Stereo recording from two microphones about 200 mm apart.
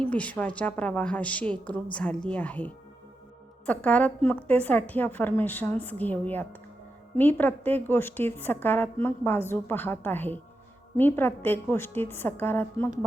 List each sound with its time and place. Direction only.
0.0 s a woman's voice: 5° left (ahead or behind)